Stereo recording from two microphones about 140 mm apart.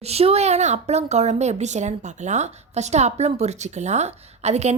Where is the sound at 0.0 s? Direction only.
45° right (ahead or behind).